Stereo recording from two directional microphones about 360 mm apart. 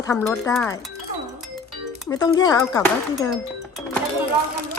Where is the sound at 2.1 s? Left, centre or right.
Centre.